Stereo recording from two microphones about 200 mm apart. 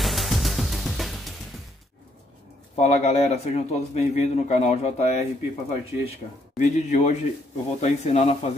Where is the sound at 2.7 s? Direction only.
35° left (ahead or behind).